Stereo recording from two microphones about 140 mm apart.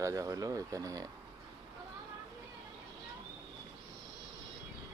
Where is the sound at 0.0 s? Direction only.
25° right (ahead or behind).